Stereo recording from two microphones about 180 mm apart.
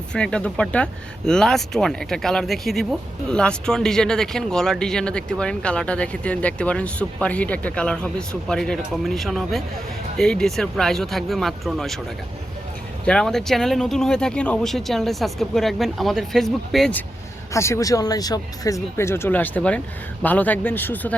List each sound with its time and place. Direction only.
0.1 s speech: 5° left (ahead or behind)
13.1 s speech: 5° left (ahead or behind)
17.5 s speech: 15° left (ahead or behind)